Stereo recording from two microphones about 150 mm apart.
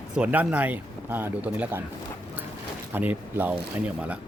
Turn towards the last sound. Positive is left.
turn(degrees=-10)  # may be behind; listen again after turning